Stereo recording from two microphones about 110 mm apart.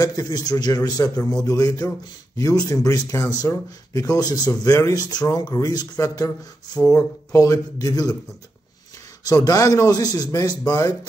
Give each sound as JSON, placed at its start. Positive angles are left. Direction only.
{"t": 0.0, "sound": "speech", "side_deg": 35}
{"t": 9.2, "sound": "speech", "side_deg": 35}